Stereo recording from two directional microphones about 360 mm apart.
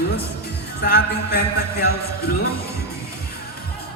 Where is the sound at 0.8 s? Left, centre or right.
Left.